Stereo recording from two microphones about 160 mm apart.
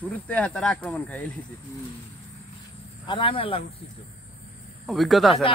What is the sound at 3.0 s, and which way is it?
Speech, 30° left (ahead or behind).